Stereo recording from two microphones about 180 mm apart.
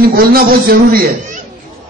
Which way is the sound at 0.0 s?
55° right (ahead or behind).